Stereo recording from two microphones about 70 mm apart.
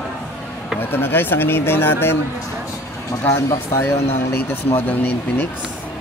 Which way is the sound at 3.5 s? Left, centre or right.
Left.